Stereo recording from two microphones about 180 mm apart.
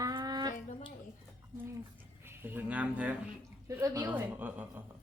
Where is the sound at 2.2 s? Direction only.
10° right (ahead or behind).